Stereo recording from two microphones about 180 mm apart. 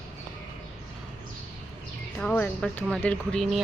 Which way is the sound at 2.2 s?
5° left (ahead or behind).